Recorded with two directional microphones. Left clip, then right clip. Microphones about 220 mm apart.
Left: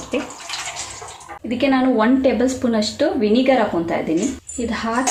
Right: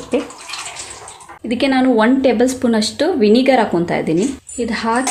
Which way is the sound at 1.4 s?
50° right (ahead or behind).